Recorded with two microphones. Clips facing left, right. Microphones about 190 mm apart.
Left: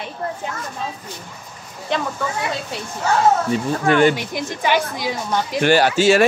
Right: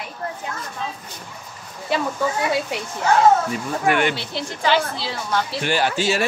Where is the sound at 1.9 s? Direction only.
5° right (ahead or behind).